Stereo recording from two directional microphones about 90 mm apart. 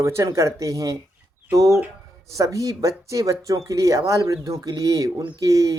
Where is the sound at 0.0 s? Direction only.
35° right (ahead or behind).